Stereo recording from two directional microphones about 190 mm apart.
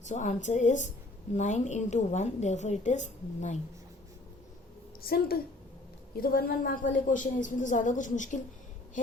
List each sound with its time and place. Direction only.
0.0 s a woman's voice: 40° left (ahead or behind)
5.0 s a woman's voice: 50° left (ahead or behind)